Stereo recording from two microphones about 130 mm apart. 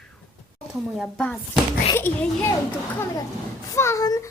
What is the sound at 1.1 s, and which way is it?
Speech, 10° left (ahead or behind).